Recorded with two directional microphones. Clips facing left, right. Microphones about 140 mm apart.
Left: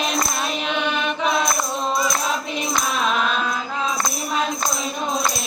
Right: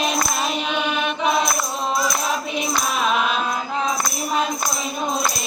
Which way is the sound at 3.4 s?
15° right (ahead or behind).